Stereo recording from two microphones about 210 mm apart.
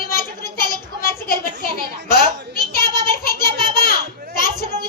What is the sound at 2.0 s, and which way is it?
Speech, 45° left (ahead or behind).